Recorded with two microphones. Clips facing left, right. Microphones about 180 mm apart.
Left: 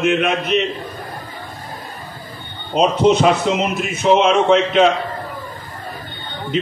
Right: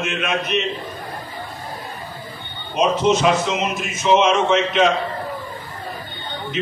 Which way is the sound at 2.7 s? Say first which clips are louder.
Left 3 dB; 60° left (ahead or behind).